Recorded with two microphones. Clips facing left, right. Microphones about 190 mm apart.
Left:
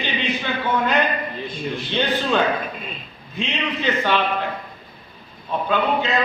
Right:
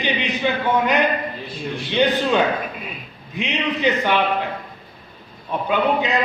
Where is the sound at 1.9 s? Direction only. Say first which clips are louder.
Right 4 dB; 15° right (ahead or behind).